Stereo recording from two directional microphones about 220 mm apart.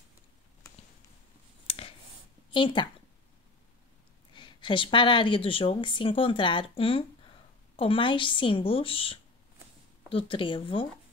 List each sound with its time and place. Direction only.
1.7 s clicking: 25° left (ahead or behind)
2.5 s speech: 20° left (ahead or behind)
4.3 s speech: 20° left (ahead or behind)